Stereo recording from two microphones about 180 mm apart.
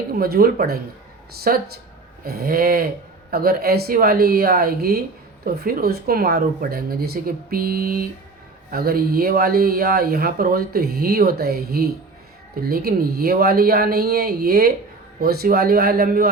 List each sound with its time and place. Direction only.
0.1 s speech: 60° right (ahead or behind)